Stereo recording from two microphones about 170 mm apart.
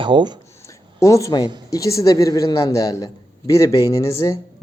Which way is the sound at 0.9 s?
20° left (ahead or behind).